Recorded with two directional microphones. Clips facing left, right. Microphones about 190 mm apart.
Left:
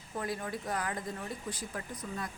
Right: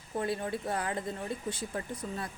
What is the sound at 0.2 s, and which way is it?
Speech, 30° right (ahead or behind).